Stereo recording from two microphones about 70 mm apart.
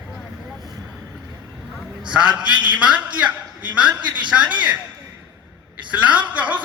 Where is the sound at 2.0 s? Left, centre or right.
Centre.